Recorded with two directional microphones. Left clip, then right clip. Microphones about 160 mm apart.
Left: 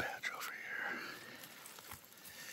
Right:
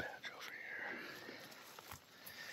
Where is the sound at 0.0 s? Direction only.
25° left (ahead or behind).